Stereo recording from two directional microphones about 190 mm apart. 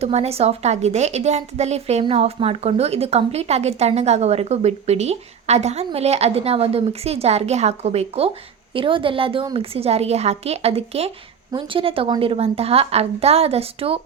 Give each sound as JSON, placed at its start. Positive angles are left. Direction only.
{"t": 0.0, "sound": "a woman's voice", "side_deg": -35}